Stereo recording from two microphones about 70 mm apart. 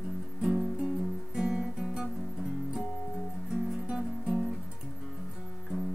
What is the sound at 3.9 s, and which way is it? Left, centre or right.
Music, centre.